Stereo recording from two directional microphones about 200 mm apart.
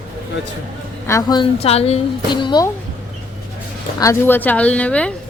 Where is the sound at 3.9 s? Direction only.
15° left (ahead or behind).